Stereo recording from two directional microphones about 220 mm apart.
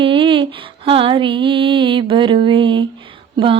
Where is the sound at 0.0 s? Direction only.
25° right (ahead or behind).